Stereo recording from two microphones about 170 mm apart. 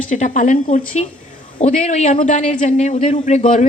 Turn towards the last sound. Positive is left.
turn(degrees=45)  # may be behind; listen again after turning